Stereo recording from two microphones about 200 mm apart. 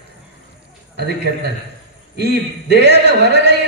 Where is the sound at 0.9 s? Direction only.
55° right (ahead or behind).